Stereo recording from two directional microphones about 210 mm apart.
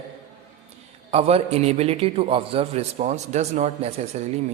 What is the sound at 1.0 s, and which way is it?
A man's voice, 30° right (ahead or behind).